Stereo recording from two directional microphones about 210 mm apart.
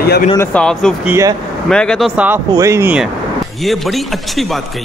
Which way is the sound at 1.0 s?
10° right (ahead or behind).